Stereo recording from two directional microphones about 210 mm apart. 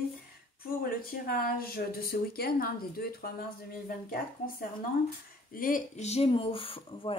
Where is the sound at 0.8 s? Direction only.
45° left (ahead or behind).